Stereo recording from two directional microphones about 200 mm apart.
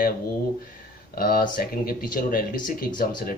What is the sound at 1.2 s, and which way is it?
Speech, 50° left (ahead or behind).